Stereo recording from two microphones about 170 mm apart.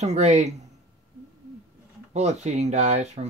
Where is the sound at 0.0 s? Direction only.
40° right (ahead or behind).